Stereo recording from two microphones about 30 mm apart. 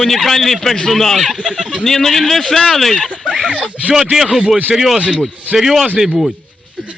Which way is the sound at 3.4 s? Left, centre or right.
Right.